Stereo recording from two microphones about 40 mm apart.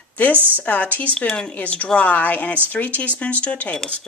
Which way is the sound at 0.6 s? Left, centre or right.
Left.